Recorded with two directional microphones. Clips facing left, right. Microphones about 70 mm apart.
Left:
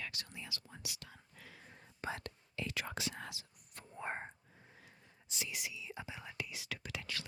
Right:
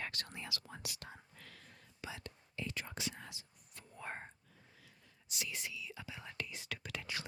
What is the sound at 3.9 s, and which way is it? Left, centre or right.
Speech, left.